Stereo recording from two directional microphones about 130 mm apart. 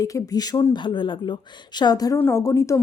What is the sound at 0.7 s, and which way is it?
A woman's voice, 40° left (ahead or behind).